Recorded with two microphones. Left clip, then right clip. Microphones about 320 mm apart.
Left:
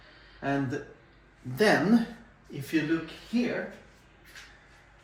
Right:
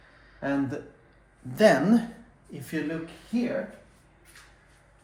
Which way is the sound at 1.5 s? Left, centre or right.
Right.